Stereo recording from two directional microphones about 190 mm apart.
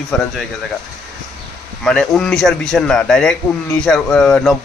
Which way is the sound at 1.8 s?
Centre (ahead or behind).